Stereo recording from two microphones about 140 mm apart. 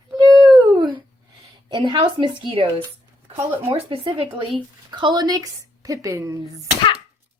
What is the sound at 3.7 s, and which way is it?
A woman's voice, 40° right (ahead or behind).